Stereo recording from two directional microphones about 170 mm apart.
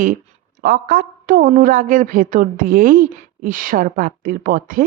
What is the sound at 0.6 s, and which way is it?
A woman's voice, 55° right (ahead or behind).